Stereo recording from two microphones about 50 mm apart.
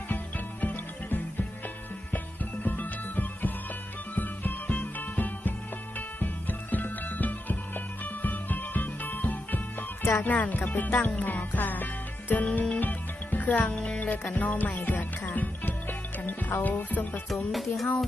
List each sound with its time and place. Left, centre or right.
0.1 s music: left
12.8 s music: left
13.7 s music: left
17.2 s music: centre